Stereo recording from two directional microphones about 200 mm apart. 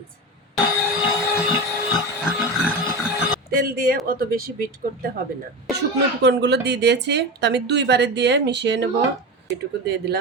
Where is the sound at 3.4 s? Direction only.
50° right (ahead or behind).